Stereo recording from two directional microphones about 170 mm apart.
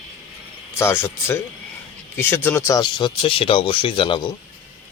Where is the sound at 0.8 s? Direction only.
15° left (ahead or behind).